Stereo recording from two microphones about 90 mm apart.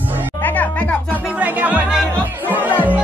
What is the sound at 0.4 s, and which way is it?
Music, 20° left (ahead or behind).